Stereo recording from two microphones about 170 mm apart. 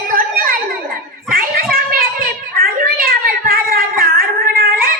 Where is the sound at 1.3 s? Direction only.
55° right (ahead or behind).